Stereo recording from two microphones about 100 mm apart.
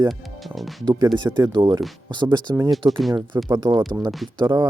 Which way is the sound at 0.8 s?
55° right (ahead or behind).